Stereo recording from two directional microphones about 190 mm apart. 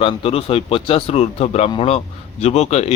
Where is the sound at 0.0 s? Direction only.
30° left (ahead or behind).